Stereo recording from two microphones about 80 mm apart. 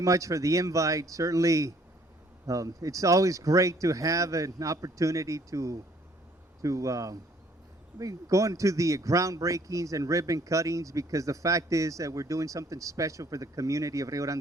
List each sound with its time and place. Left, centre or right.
0.0 s speech: right